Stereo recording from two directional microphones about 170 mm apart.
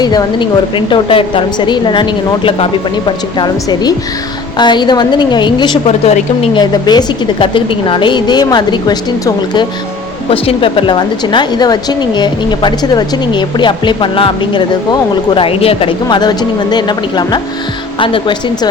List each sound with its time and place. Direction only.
0.0 s a woman's voice: 25° left (ahead or behind)
5.9 s a woman's voice: 40° left (ahead or behind)